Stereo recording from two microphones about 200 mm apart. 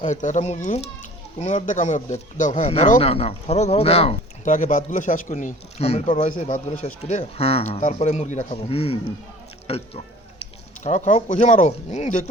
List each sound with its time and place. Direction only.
0.0 s speech: 35° left (ahead or behind)